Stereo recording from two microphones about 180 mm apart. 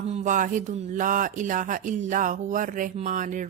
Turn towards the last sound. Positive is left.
turn(degrees=-45)  # may be behind; listen again after turning